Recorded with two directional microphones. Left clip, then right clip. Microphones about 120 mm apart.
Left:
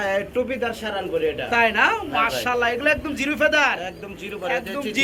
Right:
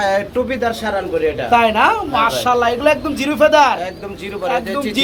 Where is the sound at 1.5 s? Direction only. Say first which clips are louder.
Right 6 dB; 20° right (ahead or behind).